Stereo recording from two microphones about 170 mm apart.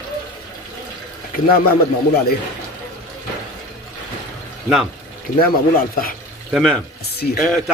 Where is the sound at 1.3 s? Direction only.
60° left (ahead or behind).